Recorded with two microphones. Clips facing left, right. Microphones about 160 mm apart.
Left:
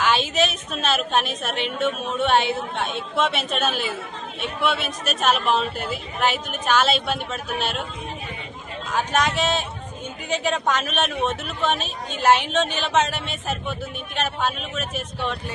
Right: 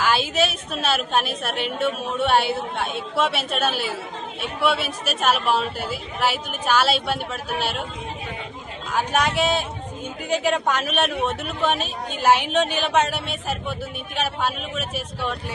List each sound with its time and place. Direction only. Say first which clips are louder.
0.0 s a woman's voice: even; 10° right (ahead or behind)
8.9 s a woman's voice: even; 10° right (ahead or behind)